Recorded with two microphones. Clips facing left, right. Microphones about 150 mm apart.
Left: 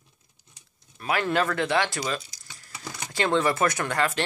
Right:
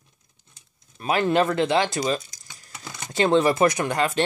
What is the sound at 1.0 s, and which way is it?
Speech, 25° right (ahead or behind).